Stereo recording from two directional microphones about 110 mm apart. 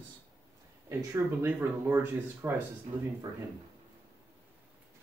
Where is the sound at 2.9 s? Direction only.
90° right.